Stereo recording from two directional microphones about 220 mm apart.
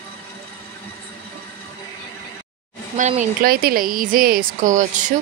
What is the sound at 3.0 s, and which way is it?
Speech, 35° right (ahead or behind).